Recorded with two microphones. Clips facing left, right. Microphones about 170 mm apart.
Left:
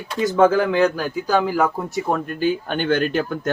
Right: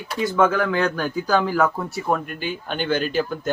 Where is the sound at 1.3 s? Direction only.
10° left (ahead or behind).